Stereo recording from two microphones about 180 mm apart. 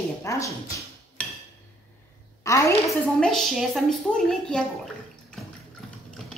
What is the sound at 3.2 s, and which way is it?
A woman's voice, centre (ahead or behind).